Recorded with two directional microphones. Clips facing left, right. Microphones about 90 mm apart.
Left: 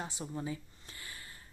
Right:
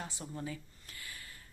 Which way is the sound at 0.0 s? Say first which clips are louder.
Left 3 dB; 20° left (ahead or behind).